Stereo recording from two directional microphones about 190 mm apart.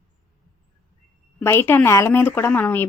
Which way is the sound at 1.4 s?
15° left (ahead or behind).